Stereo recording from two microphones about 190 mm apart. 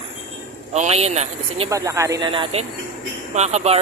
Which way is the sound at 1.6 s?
15° right (ahead or behind).